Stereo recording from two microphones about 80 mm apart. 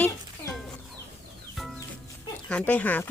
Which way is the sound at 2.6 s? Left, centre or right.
Centre.